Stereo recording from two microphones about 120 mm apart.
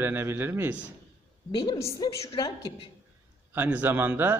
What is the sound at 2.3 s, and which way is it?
Speech, 40° left (ahead or behind).